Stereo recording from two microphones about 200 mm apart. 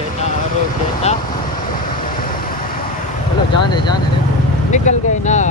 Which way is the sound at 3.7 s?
20° left (ahead or behind).